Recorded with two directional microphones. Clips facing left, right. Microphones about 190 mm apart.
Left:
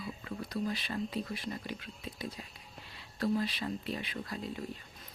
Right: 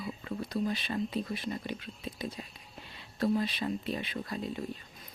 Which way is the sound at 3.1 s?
25° right (ahead or behind).